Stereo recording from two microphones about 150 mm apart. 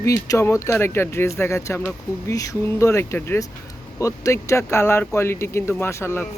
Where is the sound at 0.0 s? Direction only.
20° left (ahead or behind).